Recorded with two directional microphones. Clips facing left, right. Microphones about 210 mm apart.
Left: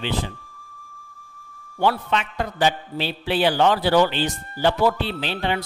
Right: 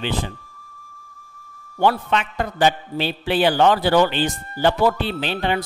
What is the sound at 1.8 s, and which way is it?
A man's voice, 50° right (ahead or behind).